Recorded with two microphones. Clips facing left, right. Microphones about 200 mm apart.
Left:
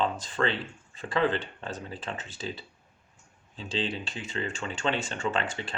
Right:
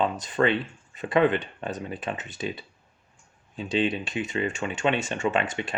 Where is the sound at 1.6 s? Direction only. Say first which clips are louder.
Right 5 dB; 15° right (ahead or behind).